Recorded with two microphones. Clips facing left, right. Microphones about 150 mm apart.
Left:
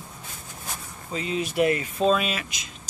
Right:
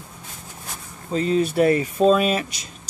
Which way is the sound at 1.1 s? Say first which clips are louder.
Right 6 dB; 40° right (ahead or behind).